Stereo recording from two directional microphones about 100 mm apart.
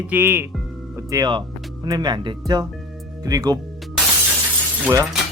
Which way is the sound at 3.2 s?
40° right (ahead or behind).